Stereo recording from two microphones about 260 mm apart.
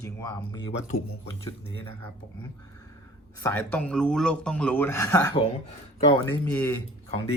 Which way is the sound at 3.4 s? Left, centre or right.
Centre.